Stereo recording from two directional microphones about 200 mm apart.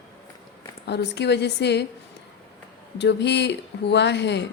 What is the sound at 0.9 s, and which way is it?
Speech, 60° left (ahead or behind).